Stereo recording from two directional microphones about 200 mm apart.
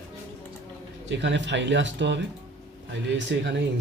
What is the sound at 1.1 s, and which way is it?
Speech, 60° right (ahead or behind).